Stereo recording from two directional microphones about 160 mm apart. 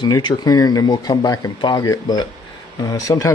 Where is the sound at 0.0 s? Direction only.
25° left (ahead or behind).